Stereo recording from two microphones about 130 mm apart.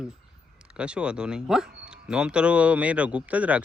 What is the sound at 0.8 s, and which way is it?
Speech, 5° right (ahead or behind).